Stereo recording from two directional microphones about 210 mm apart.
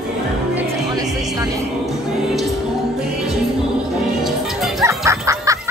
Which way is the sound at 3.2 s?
5° right (ahead or behind).